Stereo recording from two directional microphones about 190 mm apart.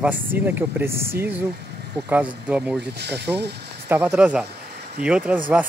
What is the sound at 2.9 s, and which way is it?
Speech, 60° right (ahead or behind).